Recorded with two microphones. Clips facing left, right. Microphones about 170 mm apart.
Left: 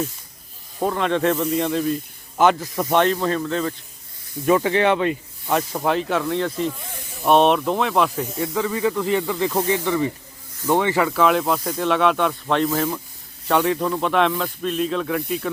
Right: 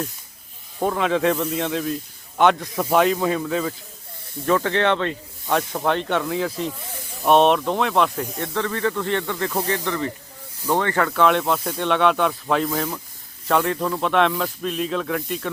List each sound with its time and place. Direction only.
0.8 s speech: centre (ahead or behind)
4.4 s speech: 10° left (ahead or behind)